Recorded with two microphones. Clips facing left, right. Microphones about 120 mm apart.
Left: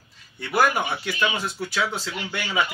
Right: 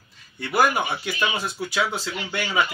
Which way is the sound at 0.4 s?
5° right (ahead or behind).